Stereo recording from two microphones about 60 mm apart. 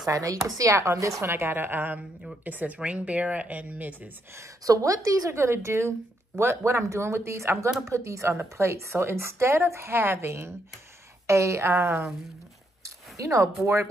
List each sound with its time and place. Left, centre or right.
0.0 s speech: right
1.3 s a woman's voice: right
4.6 s a woman's voice: right
5.3 s speech: right
11.2 s speech: right
12.8 s a sound: right